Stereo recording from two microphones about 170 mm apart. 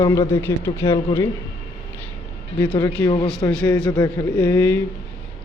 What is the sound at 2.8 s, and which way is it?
Speech, 20° left (ahead or behind).